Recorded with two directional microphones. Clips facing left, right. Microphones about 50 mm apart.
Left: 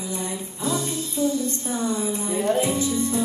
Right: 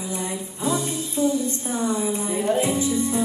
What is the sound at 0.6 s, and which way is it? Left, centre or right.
Music, right.